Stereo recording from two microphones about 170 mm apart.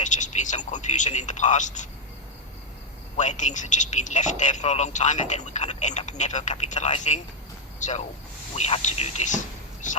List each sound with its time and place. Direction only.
0.0 s speech: 45° left (ahead or behind)
3.2 s speech: 45° left (ahead or behind)